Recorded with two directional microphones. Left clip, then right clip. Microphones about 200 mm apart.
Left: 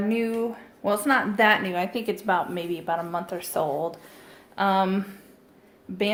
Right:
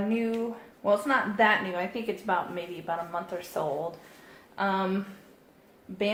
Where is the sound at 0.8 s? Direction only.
50° left (ahead or behind).